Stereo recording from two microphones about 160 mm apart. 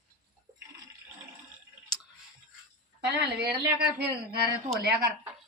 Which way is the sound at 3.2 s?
90° right.